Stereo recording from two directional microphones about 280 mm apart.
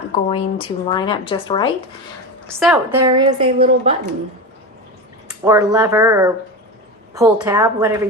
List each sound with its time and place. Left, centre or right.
0.3 s speech: centre
2.5 s a woman's voice: centre
3.0 s speech: centre
5.3 s speech: centre